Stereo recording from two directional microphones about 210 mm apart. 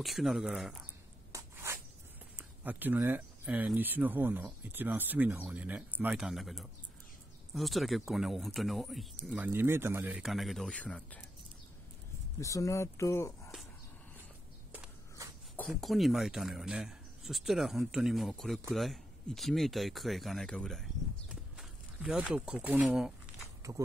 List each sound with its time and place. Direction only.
0.0 s speech: centre (ahead or behind)
1.3 s a sound: 15° right (ahead or behind)
2.3 s speech: 10° right (ahead or behind)
12.4 s speech: 15° left (ahead or behind)
14.7 s a sound: 5° right (ahead or behind)
15.5 s speech: 5° left (ahead or behind); by 23.8 s 15° right (ahead or behind)